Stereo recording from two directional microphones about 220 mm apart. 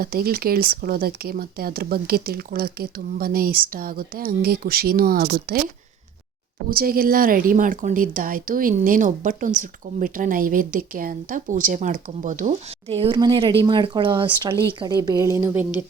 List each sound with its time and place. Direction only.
0.0 s speech: 45° right (ahead or behind)
6.7 s speech: 40° right (ahead or behind); by 15.6 s 15° right (ahead or behind)